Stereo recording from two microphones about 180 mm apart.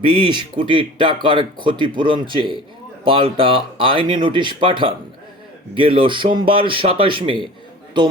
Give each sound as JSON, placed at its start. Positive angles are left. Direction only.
{"t": 0.0, "sound": "speech", "side_deg": -30}